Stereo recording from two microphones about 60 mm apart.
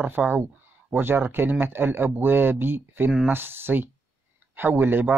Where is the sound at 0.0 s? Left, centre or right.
Right.